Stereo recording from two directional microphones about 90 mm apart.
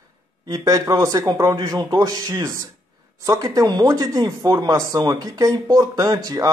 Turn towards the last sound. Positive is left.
turn(degrees=-50)  # may be behind; listen again after turning